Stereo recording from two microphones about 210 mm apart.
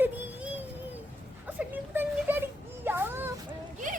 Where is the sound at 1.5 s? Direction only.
10° right (ahead or behind).